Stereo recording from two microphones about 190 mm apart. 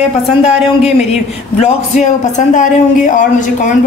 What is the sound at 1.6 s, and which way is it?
A woman's voice, 40° left (ahead or behind).